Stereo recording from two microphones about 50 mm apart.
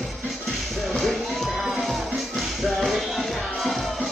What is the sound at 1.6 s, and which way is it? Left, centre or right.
Music, centre.